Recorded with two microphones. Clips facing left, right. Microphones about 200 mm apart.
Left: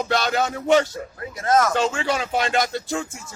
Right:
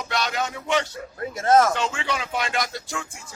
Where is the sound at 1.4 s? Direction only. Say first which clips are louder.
Right 2 dB; 25° right (ahead or behind).